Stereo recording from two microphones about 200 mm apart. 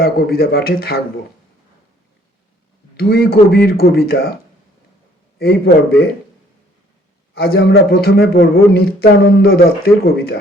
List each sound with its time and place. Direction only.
0.0 s a man's voice: 50° left (ahead or behind)
3.0 s a man's voice: 50° left (ahead or behind)
5.4 s a man's voice: 50° left (ahead or behind)
7.3 s a man's voice: 50° left (ahead or behind)